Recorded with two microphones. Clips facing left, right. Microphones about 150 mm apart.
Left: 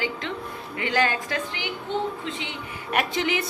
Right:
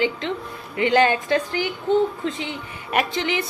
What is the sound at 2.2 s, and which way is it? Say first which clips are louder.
Speech: right 6 dB; 40° right (ahead or behind).